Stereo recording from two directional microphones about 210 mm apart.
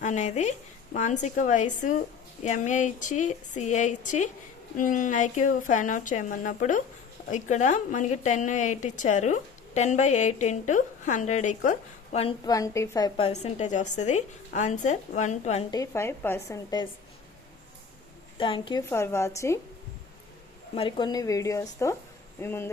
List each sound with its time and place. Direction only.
0.0 s a woman's voice: 35° left (ahead or behind)
12.5 s a woman's voice: 15° left (ahead or behind); by 15.6 s 35° left (ahead or behind)
15.7 s speech: 15° left (ahead or behind)
18.3 s a woman's voice: 25° left (ahead or behind)
18.9 s speech: 10° left (ahead or behind)
20.7 s speech: 25° left (ahead or behind)